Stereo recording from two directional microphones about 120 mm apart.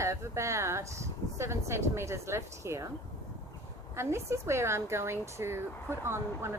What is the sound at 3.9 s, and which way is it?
Speech, 25° right (ahead or behind).